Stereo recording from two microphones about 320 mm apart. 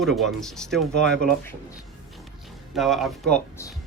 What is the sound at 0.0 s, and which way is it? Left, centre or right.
Speech, centre.